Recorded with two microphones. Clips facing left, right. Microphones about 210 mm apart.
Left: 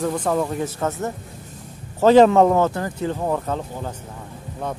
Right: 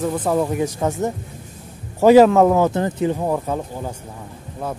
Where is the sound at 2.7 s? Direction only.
20° right (ahead or behind).